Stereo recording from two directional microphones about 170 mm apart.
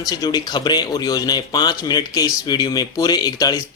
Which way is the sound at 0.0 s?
20° left (ahead or behind).